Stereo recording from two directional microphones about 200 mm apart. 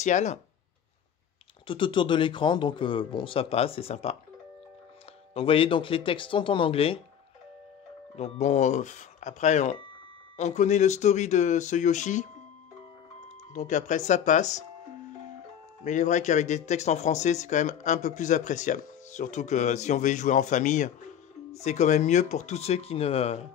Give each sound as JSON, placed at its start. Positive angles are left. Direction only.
{"t": 0.0, "sound": "speech", "side_deg": 35}
{"t": 1.7, "sound": "a man's voice", "side_deg": 25}
{"t": 5.3, "sound": "a man's voice", "side_deg": 25}
{"t": 8.2, "sound": "speech", "side_deg": 35}
{"t": 13.5, "sound": "speech", "side_deg": 40}
{"t": 15.8, "sound": "speech", "side_deg": 35}